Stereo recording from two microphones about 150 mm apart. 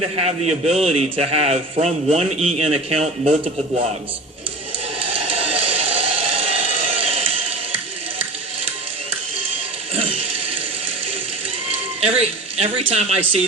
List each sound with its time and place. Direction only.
0.2 s a man's voice: 45° right (ahead or behind)
5.0 s a sound: 40° right (ahead or behind)
11.9 s speech: 40° right (ahead or behind)